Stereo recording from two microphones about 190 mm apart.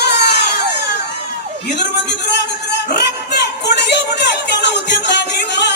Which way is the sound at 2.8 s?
60° left (ahead or behind).